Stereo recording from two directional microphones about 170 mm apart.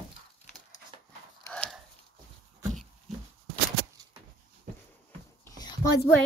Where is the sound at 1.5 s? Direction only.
5° left (ahead or behind).